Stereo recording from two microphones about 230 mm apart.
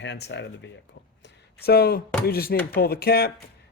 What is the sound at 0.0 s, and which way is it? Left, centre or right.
Speech, left.